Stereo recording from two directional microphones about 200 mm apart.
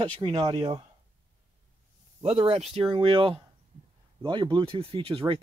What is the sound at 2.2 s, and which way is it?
Speech, 25° right (ahead or behind).